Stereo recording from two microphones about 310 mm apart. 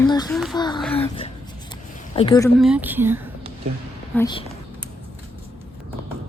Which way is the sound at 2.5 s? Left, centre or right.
Centre.